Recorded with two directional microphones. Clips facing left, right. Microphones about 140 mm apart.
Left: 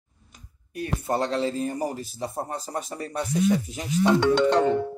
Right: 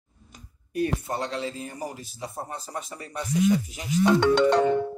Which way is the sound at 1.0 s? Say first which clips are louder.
Left 5 dB; 35° left (ahead or behind).